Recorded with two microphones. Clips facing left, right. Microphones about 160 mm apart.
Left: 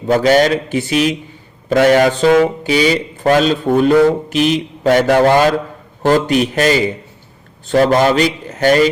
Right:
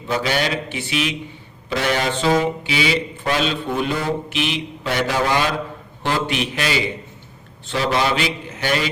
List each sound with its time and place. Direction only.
0.1 s mantra: 45° left (ahead or behind)